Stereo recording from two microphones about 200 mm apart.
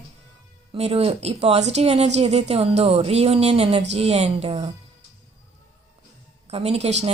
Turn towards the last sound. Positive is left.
turn(degrees=-35)  # may be behind; listen again after turning